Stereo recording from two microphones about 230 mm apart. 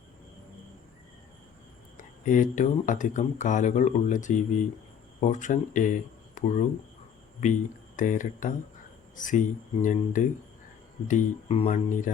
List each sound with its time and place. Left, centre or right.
2.0 s speech: left
7.9 s speech: left